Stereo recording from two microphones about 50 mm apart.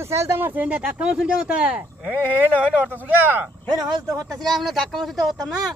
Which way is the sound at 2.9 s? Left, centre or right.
Right.